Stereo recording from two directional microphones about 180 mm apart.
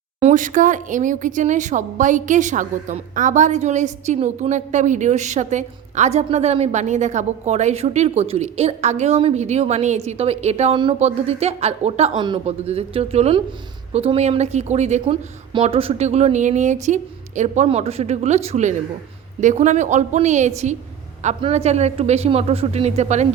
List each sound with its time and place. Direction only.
0.2 s speech: 40° right (ahead or behind)